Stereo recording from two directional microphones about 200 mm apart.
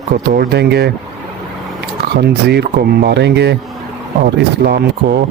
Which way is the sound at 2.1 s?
55° right (ahead or behind).